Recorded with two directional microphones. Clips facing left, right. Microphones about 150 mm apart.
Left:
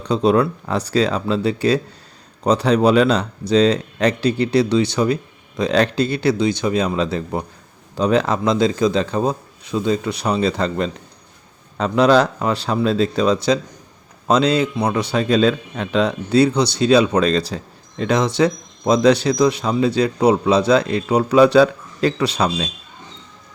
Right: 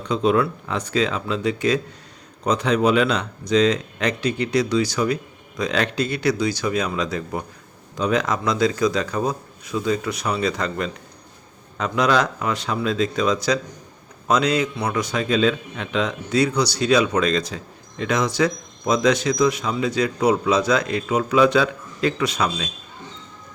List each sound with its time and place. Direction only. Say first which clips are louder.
0.0 s a man's voice: left 3 dB; 35° left (ahead or behind)